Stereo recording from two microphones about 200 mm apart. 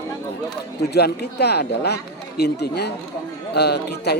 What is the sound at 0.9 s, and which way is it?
A man's voice, 55° left (ahead or behind).